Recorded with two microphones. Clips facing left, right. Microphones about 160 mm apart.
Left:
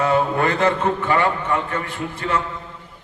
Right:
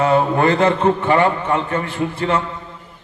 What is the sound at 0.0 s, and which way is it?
A man's voice, 30° right (ahead or behind).